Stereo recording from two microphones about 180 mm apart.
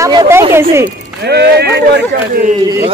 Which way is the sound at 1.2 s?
65° right (ahead or behind).